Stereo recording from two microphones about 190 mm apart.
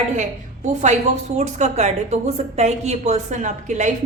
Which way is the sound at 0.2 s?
40° right (ahead or behind).